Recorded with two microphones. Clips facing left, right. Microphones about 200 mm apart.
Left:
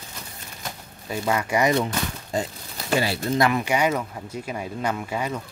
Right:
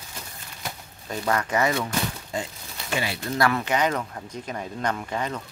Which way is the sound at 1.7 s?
35° left (ahead or behind).